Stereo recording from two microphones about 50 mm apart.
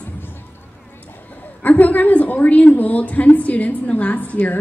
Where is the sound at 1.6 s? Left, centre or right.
Left.